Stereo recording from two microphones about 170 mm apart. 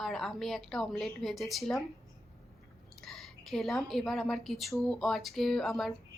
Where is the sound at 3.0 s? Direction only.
Centre (ahead or behind).